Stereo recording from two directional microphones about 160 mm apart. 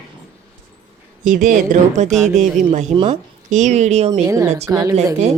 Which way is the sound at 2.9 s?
35° right (ahead or behind).